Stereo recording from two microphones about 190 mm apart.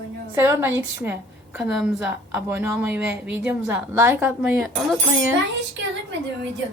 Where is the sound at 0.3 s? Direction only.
10° right (ahead or behind).